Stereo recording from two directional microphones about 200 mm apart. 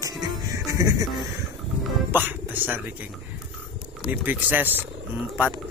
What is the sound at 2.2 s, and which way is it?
Speech, 10° right (ahead or behind).